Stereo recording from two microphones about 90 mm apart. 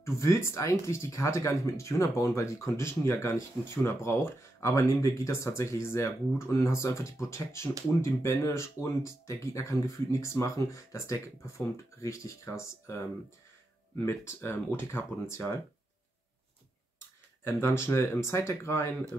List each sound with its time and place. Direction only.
0.0 s speech: 30° left (ahead or behind)
17.5 s speech: 30° left (ahead or behind)